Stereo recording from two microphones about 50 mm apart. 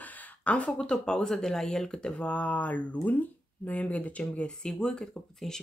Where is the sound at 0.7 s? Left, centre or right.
Centre.